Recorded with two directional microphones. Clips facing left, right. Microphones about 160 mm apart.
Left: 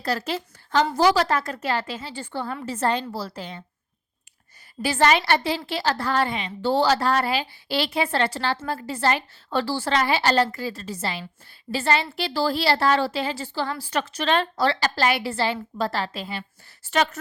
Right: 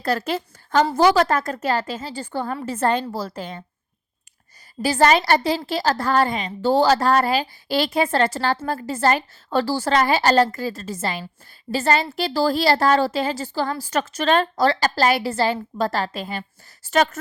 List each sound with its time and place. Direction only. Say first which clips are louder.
0.0 s a woman's voice: right 4 dB; 50° right (ahead or behind)
4.8 s speech: right 3 dB; 40° right (ahead or behind)